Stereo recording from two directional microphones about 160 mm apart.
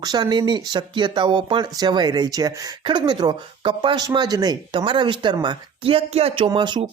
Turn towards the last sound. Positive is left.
turn(degrees=-30)  # may be behind; listen again after turning